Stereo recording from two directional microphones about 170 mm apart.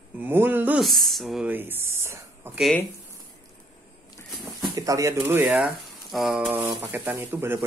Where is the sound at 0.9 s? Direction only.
Centre (ahead or behind).